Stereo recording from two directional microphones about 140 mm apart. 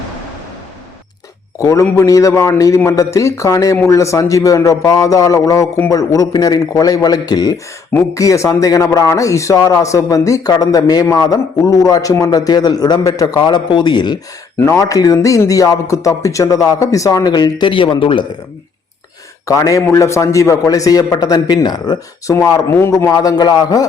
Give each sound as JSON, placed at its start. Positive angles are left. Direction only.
{"t": 1.5, "sound": "speech", "side_deg": 20}
{"t": 19.5, "sound": "speech", "side_deg": 25}